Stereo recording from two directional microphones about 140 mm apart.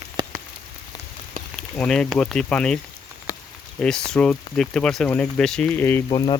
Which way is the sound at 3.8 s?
5° left (ahead or behind).